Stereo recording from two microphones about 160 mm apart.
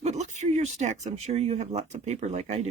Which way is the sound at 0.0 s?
45° right (ahead or behind).